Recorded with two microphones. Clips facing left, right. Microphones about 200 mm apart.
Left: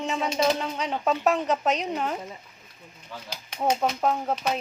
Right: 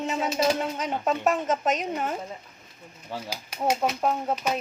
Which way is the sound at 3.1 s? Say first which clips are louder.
Right 6 dB; 35° right (ahead or behind).